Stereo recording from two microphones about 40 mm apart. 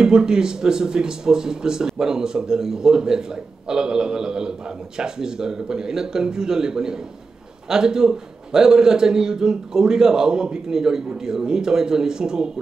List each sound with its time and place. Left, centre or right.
0.0 s speech: centre